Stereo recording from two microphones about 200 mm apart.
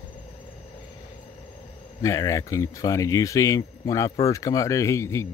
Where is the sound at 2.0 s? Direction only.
15° left (ahead or behind).